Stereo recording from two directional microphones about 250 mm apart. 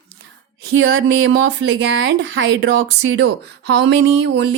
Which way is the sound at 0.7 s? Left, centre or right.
Right.